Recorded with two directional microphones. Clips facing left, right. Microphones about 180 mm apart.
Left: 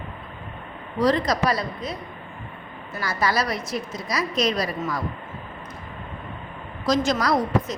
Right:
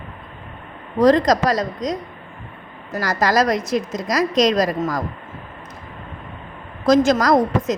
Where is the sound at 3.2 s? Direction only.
90° right.